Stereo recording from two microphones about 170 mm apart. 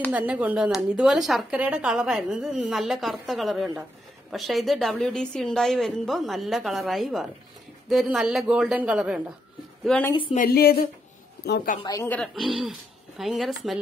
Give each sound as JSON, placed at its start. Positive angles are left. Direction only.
{"t": 0.1, "sound": "a woman's voice", "side_deg": -10}
{"t": 9.8, "sound": "speech", "side_deg": 10}
{"t": 10.3, "sound": "a woman's voice", "side_deg": 60}
{"t": 12.0, "sound": "speech", "side_deg": 10}
{"t": 12.4, "sound": "a woman's voice", "side_deg": 0}